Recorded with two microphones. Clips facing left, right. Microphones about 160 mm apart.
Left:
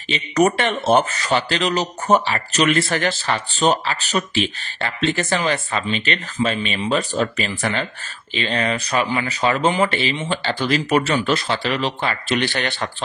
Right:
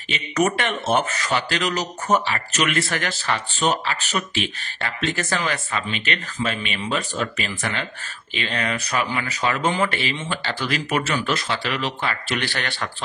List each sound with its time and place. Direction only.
0.1 s speech: 30° left (ahead or behind)